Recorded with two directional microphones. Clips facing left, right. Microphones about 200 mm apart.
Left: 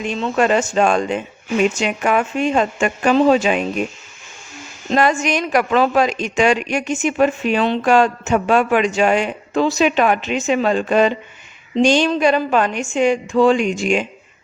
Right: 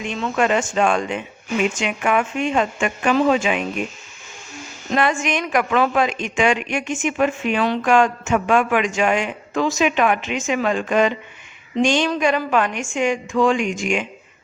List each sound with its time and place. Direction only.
0.0 s a woman's voice: 35° left (ahead or behind)
4.9 s a woman's voice: 40° left (ahead or behind)